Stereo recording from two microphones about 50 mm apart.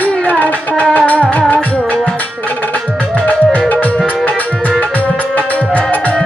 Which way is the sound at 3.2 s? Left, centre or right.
Left.